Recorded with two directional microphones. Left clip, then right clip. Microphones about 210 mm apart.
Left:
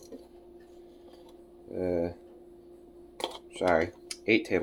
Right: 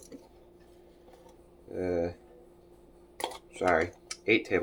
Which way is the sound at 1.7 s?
15° left (ahead or behind).